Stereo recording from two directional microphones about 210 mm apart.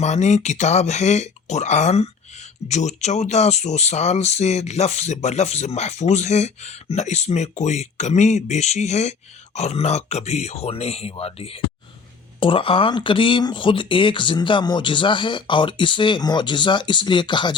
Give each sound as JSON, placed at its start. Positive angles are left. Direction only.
{"t": 0.0, "sound": "speech", "side_deg": 35}